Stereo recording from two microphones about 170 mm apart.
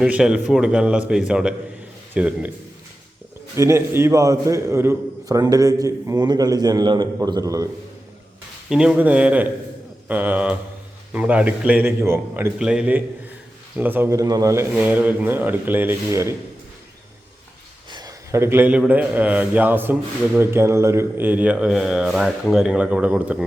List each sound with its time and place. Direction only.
0.0 s a man's voice: 5° right (ahead or behind)
3.5 s a man's voice: 15° right (ahead or behind)
8.7 s a man's voice: 5° right (ahead or behind)
17.9 s a man's voice: 20° right (ahead or behind)